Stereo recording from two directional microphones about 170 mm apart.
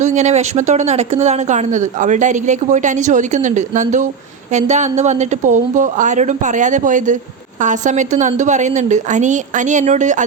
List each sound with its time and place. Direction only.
0.0 s speech: 45° right (ahead or behind)